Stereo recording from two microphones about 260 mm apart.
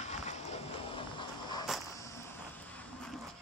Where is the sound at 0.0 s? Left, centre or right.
Left.